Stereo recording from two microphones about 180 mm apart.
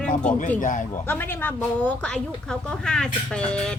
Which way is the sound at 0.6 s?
45° left (ahead or behind).